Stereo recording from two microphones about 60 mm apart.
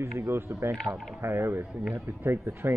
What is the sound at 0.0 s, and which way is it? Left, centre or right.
Speech, right.